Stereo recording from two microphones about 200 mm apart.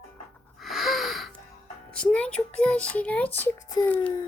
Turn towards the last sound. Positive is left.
turn(degrees=10)  # may be behind; listen again after turning